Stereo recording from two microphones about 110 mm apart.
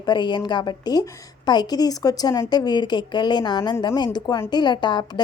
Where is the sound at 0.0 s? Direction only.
40° left (ahead or behind).